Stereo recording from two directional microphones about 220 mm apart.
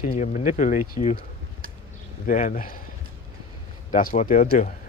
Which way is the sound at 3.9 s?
35° left (ahead or behind).